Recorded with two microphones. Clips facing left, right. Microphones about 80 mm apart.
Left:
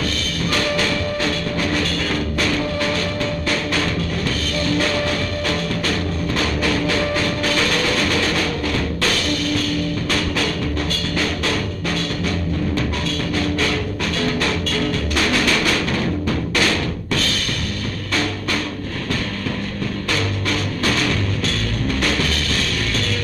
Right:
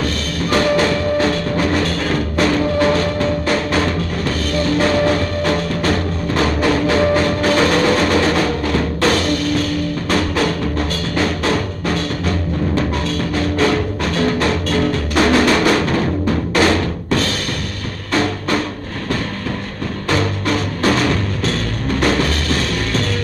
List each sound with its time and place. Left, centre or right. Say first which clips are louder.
0.0 s music: right 3 dB; right
20.1 s music: right 6 dB; right